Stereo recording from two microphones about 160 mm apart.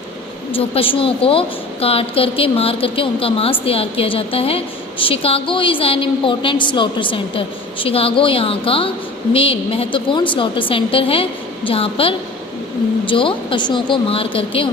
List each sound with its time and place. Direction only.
0.5 s a woman's voice: 35° left (ahead or behind)